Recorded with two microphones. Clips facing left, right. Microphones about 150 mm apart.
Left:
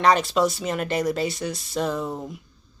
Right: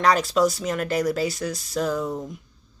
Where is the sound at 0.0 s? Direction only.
Centre (ahead or behind).